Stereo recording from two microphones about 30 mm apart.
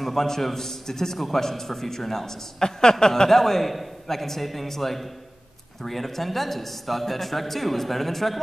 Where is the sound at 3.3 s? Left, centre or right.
Centre.